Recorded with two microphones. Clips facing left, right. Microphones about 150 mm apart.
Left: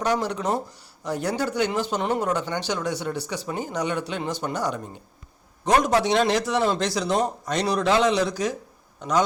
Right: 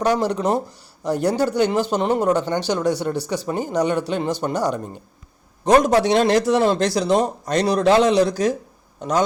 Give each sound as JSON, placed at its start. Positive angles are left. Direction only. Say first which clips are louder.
{"t": 0.0, "sound": "speech", "louder": "right 5 dB", "side_deg": -35}